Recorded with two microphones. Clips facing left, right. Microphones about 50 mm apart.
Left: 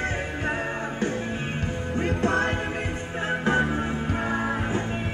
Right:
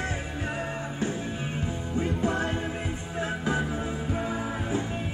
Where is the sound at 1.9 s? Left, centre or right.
Left.